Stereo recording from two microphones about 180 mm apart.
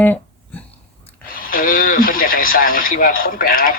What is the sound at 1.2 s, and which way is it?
Speech, 50° left (ahead or behind).